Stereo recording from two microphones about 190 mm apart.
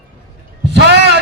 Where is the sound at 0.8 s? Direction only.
60° right (ahead or behind).